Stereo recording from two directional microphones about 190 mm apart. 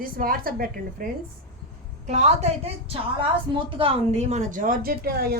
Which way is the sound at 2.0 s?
40° right (ahead or behind).